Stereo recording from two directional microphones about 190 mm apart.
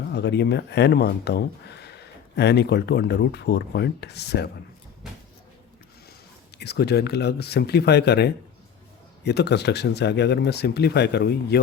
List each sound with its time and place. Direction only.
0.1 s speech: 60° left (ahead or behind)
6.6 s speech: 60° left (ahead or behind)